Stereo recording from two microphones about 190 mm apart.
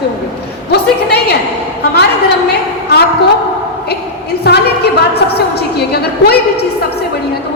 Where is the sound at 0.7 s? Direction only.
60° left (ahead or behind).